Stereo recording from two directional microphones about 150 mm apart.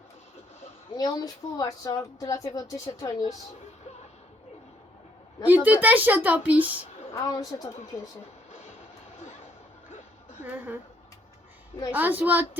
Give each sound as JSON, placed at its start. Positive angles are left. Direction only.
{"t": 0.9, "sound": "speech", "side_deg": 25}
{"t": 5.5, "sound": "a woman's voice", "side_deg": -10}
{"t": 7.1, "sound": "speech", "side_deg": 25}
{"t": 10.4, "sound": "a woman's voice", "side_deg": -10}
{"t": 11.9, "sound": "a woman's voice", "side_deg": -10}